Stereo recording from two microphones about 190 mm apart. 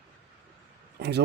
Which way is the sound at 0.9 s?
60° right (ahead or behind).